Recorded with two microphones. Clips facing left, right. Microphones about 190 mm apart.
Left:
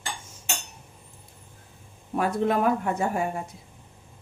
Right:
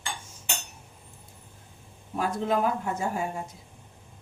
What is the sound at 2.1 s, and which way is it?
Speech, 60° left (ahead or behind).